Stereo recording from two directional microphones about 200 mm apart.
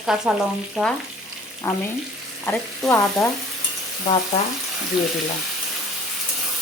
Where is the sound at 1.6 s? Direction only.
15° left (ahead or behind).